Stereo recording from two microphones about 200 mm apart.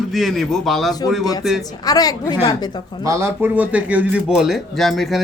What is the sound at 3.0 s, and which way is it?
Speech, 15° right (ahead or behind).